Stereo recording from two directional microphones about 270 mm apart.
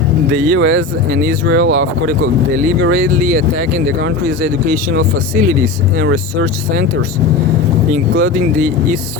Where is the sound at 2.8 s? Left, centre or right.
Right.